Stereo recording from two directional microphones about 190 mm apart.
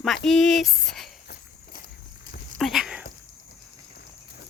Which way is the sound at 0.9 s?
Centre (ahead or behind).